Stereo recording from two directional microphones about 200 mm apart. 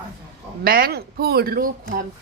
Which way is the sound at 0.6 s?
50° right (ahead or behind).